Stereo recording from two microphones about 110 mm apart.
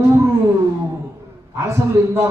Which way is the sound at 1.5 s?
25° right (ahead or behind).